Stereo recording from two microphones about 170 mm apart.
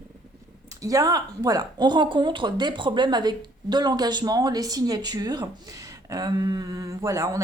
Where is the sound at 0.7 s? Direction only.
20° right (ahead or behind).